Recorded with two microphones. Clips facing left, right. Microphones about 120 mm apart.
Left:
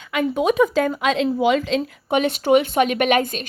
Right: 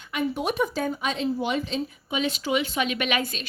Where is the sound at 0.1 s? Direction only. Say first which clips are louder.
Left 8 dB; 90° left.